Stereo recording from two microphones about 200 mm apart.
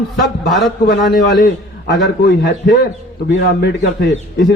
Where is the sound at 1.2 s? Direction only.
55° left (ahead or behind).